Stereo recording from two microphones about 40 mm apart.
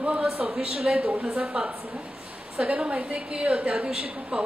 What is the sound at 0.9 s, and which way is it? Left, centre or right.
Speech, right.